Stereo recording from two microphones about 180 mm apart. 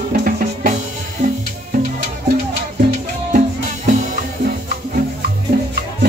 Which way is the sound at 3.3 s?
45° right (ahead or behind).